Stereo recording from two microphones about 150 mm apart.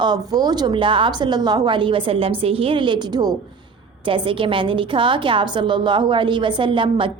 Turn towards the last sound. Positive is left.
turn(degrees=-35)  # may be behind; listen again after turning